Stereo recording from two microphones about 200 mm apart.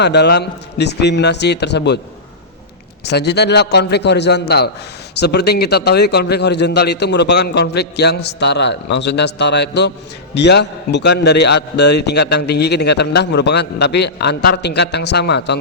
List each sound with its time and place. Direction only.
0.0 s a man's voice: 55° left (ahead or behind)
3.0 s a man's voice: 55° left (ahead or behind)